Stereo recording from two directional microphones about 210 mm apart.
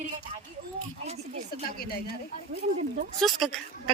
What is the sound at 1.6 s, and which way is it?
Speech, 45° left (ahead or behind).